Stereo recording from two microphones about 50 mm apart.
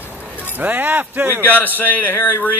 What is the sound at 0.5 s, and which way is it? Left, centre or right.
Speech, right.